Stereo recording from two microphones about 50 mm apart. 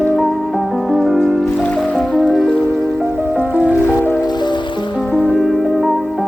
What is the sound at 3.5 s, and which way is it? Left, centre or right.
Music, right.